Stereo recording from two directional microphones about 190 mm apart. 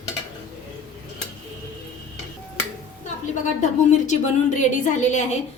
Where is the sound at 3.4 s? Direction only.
40° left (ahead or behind).